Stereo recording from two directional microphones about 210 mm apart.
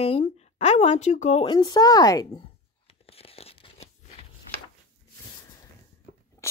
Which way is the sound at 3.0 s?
30° left (ahead or behind).